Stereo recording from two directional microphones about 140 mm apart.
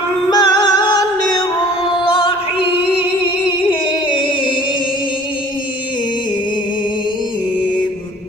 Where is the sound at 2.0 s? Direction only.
40° left (ahead or behind).